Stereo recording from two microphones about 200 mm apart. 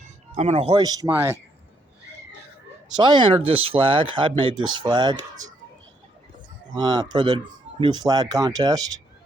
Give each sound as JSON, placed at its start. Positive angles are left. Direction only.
{"t": 0.3, "sound": "speech", "side_deg": -35}
{"t": 3.0, "sound": "speech", "side_deg": -20}
{"t": 6.7, "sound": "speech", "side_deg": -20}